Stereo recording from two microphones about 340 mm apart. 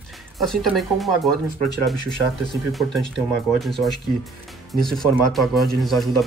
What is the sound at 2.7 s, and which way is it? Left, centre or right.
Speech, centre.